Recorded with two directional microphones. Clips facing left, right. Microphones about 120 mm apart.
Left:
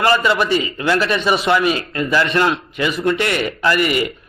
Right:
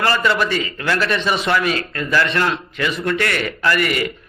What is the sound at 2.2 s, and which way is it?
Speech, 25° left (ahead or behind).